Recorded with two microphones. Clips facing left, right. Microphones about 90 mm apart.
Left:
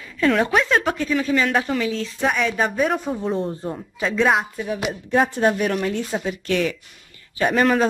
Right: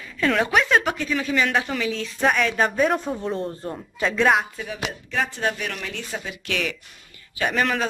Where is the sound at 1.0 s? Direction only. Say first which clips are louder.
Left 3 dB; 25° left (ahead or behind).